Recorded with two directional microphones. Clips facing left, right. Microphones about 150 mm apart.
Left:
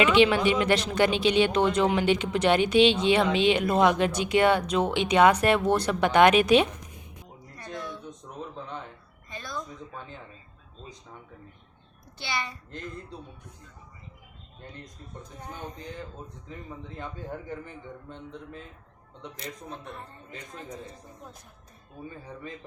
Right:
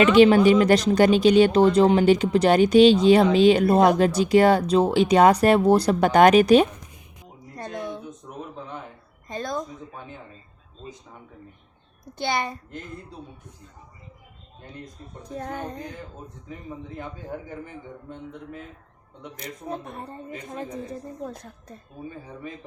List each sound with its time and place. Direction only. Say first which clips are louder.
0.1 s speech: right 7 dB; 40° right (ahead or behind)
9.3 s a woman's voice: right 10 dB; 45° right (ahead or behind)
12.2 s a woman's voice: right 8 dB; 50° right (ahead or behind)
15.2 s music: right 8 dB; 80° right
19.7 s speech: right 7 dB; 55° right (ahead or behind)
21.2 s music: right 11 dB; 70° right (ahead or behind)